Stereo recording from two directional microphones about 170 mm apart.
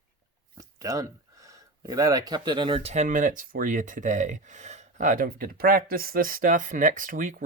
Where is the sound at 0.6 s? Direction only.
20° right (ahead or behind).